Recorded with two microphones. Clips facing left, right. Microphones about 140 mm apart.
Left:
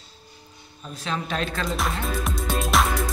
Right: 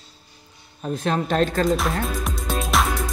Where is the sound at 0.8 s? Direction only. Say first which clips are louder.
Right 7 dB; 55° right (ahead or behind).